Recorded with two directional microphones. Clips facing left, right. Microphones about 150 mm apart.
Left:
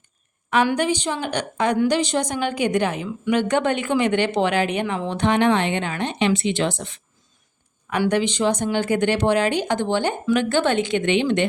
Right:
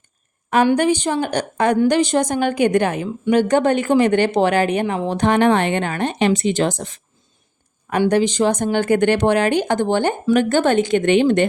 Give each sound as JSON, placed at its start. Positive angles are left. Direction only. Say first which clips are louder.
{"t": 0.8, "sound": "a woman's voice", "louder": "right 5 dB", "side_deg": -50}
{"t": 8.1, "sound": "a woman's voice", "louder": "right 4 dB", "side_deg": -45}